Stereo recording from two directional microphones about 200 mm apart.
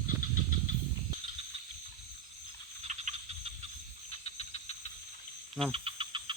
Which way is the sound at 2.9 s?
35° right (ahead or behind).